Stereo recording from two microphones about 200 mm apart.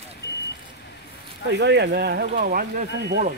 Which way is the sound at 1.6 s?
60° right (ahead or behind).